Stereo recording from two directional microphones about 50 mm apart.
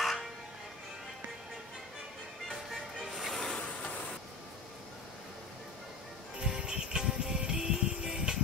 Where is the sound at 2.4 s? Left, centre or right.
Centre.